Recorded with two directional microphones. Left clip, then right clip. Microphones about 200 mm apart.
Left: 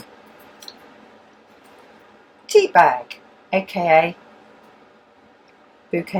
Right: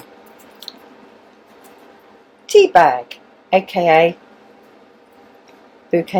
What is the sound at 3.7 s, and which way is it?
Speech, 35° right (ahead or behind).